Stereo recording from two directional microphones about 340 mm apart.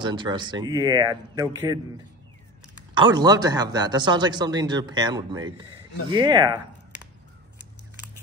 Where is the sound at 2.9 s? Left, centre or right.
Centre.